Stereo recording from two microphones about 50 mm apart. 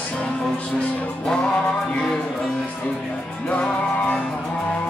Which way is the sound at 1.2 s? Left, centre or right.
Centre.